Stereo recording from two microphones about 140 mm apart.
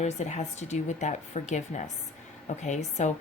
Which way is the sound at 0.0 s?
55° left (ahead or behind).